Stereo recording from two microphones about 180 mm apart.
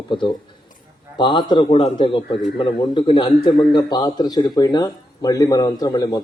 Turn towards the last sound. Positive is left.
turn(degrees=25)  # may be behind; listen again after turning